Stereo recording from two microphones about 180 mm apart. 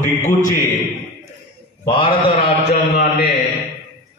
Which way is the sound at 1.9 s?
30° left (ahead or behind).